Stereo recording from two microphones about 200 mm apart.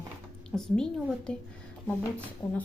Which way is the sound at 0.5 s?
Centre (ahead or behind).